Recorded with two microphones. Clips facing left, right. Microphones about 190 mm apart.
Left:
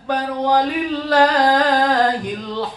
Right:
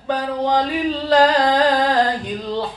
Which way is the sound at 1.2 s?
25° right (ahead or behind).